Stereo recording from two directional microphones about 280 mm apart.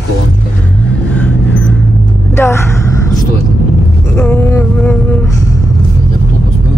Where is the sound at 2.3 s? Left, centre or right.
Centre.